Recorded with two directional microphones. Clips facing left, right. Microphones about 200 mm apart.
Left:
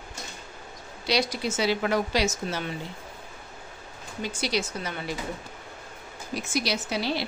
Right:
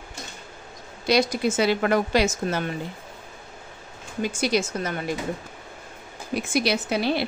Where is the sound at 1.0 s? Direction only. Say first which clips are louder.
Right 5 dB; 50° right (ahead or behind).